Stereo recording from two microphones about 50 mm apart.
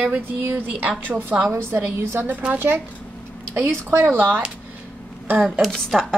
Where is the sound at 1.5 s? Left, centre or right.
Right.